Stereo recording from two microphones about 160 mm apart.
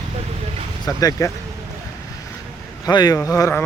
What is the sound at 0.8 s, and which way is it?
Speech, 20° left (ahead or behind).